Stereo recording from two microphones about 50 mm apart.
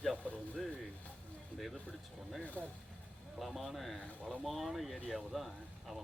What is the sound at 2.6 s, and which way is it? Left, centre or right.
Speech, left.